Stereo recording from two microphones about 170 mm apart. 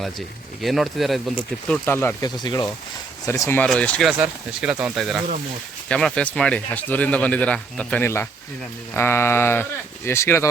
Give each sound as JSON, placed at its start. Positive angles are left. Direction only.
{"t": 0.6, "sound": "speech", "side_deg": 0}
{"t": 1.7, "sound": "speech", "side_deg": 10}
{"t": 2.2, "sound": "speech", "side_deg": 25}
{"t": 4.2, "sound": "speech", "side_deg": -5}